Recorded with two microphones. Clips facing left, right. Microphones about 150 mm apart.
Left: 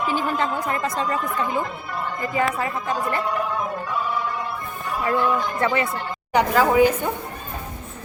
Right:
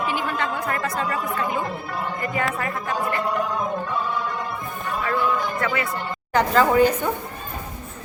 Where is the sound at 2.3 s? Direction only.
20° left (ahead or behind).